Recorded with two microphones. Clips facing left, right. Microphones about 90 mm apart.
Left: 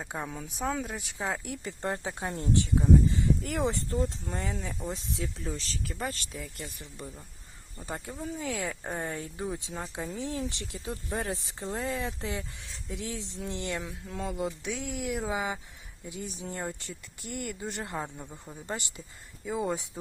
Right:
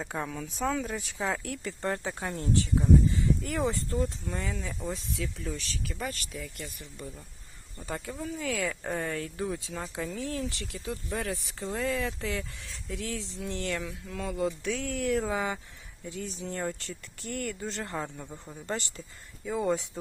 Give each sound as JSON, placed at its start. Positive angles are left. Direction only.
{"t": 0.0, "sound": "speech", "side_deg": 15}
{"t": 0.9, "sound": "speech", "side_deg": 5}
{"t": 1.5, "sound": "speech", "side_deg": 20}
{"t": 4.3, "sound": "speech", "side_deg": 35}